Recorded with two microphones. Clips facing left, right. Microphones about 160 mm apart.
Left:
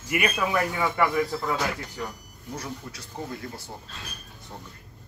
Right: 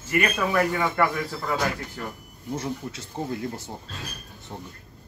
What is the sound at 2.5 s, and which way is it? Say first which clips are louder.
Speech: right 6 dB; 25° right (ahead or behind).